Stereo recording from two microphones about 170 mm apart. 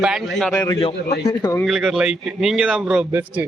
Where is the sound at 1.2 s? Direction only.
15° left (ahead or behind).